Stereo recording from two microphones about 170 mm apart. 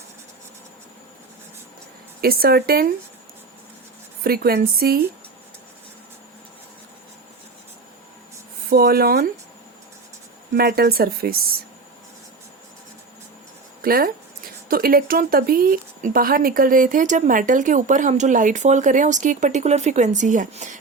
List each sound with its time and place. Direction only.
2.2 s speech: 60° right (ahead or behind)
4.2 s speech: 65° right (ahead or behind)
8.7 s speech: 65° right (ahead or behind)
10.5 s speech: 70° right (ahead or behind)
13.8 s a woman's voice: 60° right (ahead or behind)